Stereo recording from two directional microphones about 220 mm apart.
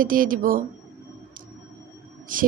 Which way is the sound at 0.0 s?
40° right (ahead or behind).